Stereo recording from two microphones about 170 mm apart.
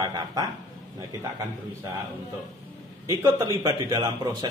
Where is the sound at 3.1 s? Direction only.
20° right (ahead or behind).